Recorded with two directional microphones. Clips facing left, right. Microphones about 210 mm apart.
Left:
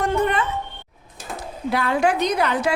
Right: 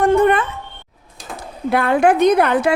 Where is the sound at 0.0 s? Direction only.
55° right (ahead or behind).